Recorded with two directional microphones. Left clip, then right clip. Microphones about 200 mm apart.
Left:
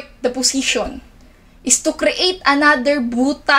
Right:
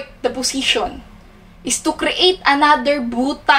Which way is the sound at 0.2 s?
35° left (ahead or behind).